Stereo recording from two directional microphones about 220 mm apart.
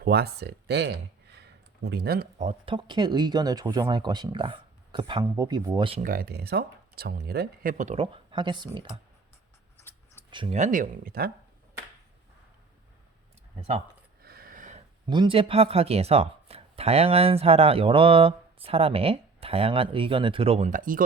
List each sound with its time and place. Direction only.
0.0 s speech: 45° right (ahead or behind); by 6.1 s 25° right (ahead or behind)
6.1 s speech: 45° right (ahead or behind); by 8.9 s 20° right (ahead or behind)
10.3 s speech: 25° right (ahead or behind); by 11.3 s 40° right (ahead or behind)
14.2 s a sound: 45° right (ahead or behind)
15.0 s speech: 20° right (ahead or behind); by 21.0 s 35° right (ahead or behind)